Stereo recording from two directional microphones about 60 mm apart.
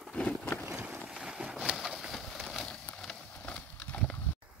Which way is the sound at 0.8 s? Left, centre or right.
Right.